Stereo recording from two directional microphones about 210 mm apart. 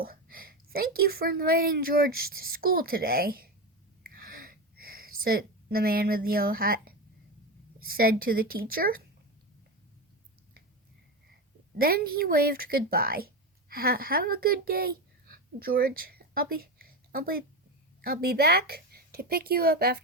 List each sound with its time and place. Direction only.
0.0 s a woman's voice: 45° right (ahead or behind)
4.0 s a sound: 45° right (ahead or behind)
7.8 s a woman's voice: 45° right (ahead or behind)
11.8 s a woman's voice: 45° right (ahead or behind)